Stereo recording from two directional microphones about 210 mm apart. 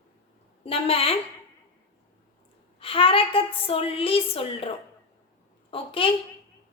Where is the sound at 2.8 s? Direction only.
25° left (ahead or behind).